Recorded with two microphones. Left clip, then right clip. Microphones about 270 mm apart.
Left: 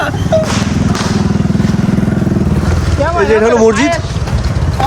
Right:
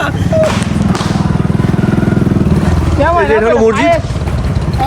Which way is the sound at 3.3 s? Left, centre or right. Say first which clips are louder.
Left 1 dB; centre.